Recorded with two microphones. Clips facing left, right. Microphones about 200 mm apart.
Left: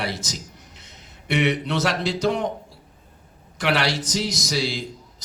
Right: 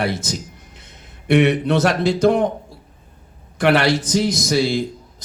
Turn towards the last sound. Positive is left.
turn(degrees=-55)  # may be behind; listen again after turning